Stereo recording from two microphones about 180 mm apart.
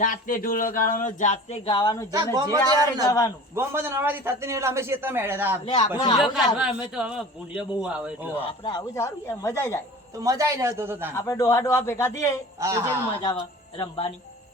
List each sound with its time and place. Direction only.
0.0 s speech: 50° left (ahead or behind)
1.6 s speech: 25° left (ahead or behind)
2.1 s a man's voice: 20° right (ahead or behind)
3.1 s speech: 20° left (ahead or behind)
3.5 s a man's voice: 15° right (ahead or behind)
5.6 s speech: 30° left (ahead or behind)
6.1 s a man's voice: centre (ahead or behind)
8.4 s speech: 25° left (ahead or behind)
10.2 s a man's voice: 20° right (ahead or behind)
11.2 s speech: 15° left (ahead or behind)
12.5 s a man's voice: 15° right (ahead or behind)
13.7 s speech: 25° left (ahead or behind)